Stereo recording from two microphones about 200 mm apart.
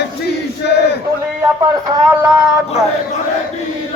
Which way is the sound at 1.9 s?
20° right (ahead or behind).